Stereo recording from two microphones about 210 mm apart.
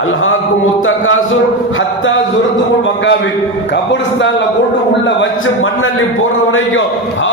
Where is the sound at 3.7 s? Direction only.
60° left (ahead or behind).